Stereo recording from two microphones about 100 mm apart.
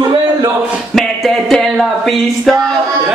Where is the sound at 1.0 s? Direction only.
5° left (ahead or behind).